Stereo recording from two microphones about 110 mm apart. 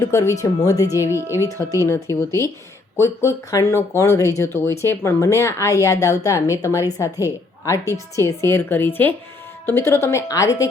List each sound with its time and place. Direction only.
0.0 s speech: 30° left (ahead or behind)